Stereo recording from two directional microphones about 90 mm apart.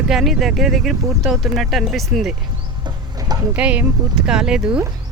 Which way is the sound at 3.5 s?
15° right (ahead or behind).